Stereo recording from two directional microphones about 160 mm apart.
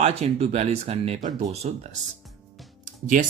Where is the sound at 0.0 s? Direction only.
40° right (ahead or behind).